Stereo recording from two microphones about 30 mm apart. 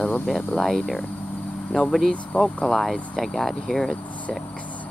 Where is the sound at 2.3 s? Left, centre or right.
Left.